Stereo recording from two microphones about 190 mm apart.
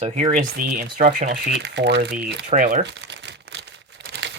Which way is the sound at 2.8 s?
65° right (ahead or behind).